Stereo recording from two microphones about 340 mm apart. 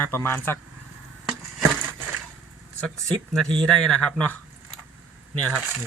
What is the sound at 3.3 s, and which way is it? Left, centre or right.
Speech, centre.